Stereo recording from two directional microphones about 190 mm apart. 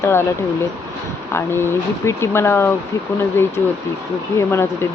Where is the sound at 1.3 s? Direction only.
10° left (ahead or behind).